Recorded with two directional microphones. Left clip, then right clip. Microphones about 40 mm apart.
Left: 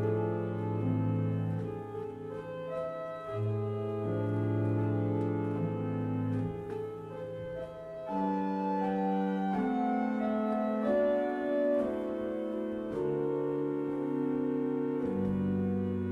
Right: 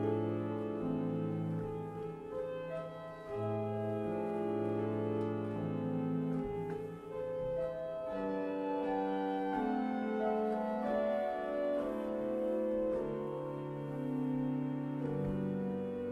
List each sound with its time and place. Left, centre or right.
0.1 s music: centre
4.5 s organ: left
8.5 s organ: left
9.1 s keyboard: centre
10.3 s music: centre
10.9 s music: left